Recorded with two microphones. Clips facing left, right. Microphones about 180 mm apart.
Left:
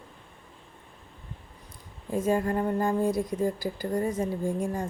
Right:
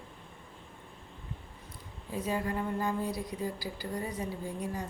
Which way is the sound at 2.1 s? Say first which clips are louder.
Left 7 dB; 45° left (ahead or behind).